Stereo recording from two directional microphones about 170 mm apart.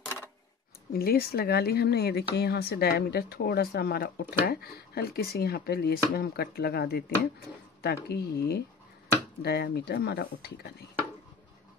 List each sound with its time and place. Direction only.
0.9 s speech: 65° left (ahead or behind)